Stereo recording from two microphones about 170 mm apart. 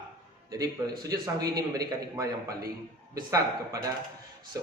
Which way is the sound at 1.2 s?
20° right (ahead or behind).